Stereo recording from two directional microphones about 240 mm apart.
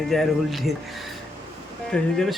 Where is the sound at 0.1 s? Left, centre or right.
Centre.